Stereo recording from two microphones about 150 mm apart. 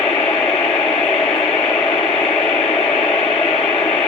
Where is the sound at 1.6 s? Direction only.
Centre (ahead or behind).